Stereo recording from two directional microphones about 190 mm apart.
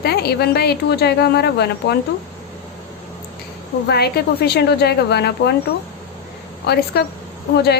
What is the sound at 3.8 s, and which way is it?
A woman's voice, 60° left (ahead or behind).